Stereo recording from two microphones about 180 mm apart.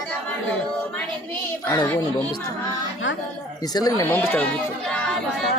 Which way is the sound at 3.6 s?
20° left (ahead or behind).